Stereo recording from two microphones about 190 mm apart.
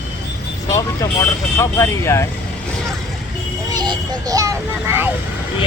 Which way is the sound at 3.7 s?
20° right (ahead or behind).